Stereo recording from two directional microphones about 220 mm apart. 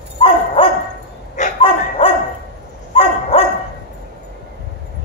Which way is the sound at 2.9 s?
25° left (ahead or behind).